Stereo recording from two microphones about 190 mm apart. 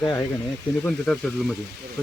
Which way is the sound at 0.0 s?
15° left (ahead or behind).